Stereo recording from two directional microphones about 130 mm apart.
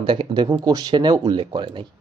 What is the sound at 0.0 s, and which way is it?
Speech, 40° right (ahead or behind).